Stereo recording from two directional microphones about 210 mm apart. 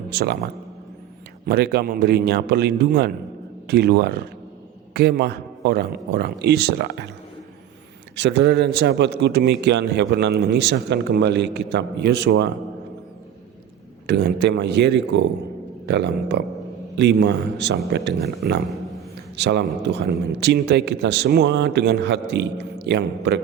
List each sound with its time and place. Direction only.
0.1 s a man's voice: 50° right (ahead or behind)
1.5 s a man's voice: 50° right (ahead or behind)
8.1 s a man's voice: 55° right (ahead or behind)
14.1 s a man's voice: 55° right (ahead or behind)